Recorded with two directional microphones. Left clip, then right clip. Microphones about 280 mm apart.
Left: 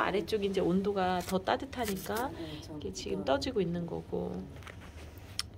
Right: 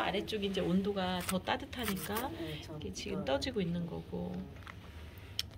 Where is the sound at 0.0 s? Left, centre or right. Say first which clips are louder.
Left 4 dB; centre.